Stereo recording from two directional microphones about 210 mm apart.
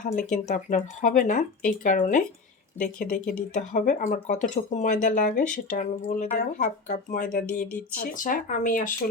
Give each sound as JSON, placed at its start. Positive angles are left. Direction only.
{"t": 0.0, "sound": "speech", "side_deg": 35}
{"t": 7.4, "sound": "speech", "side_deg": 5}
{"t": 7.9, "sound": "speech", "side_deg": 40}